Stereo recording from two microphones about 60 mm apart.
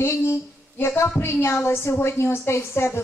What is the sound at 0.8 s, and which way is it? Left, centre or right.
A woman's voice, left.